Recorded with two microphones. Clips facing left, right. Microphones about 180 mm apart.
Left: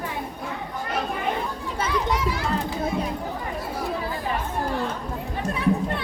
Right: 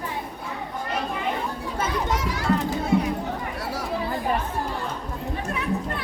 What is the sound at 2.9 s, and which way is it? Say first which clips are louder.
Chatter: right 9 dB; 75° right (ahead or behind).